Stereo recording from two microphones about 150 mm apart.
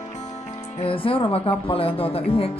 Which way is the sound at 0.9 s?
35° left (ahead or behind).